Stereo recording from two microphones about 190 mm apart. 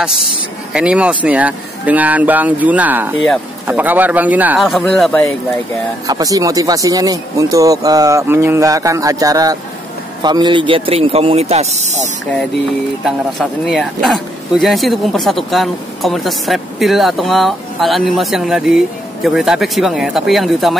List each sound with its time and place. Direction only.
0.7 s speech: 5° right (ahead or behind)
6.0 s speech: 20° right (ahead or behind); by 12.1 s 35° right (ahead or behind)
13.0 s speech: centre (ahead or behind)